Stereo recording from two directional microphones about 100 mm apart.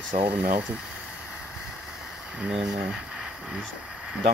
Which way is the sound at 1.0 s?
10° right (ahead or behind).